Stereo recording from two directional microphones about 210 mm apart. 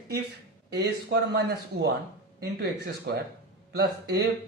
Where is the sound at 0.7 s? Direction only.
50° right (ahead or behind).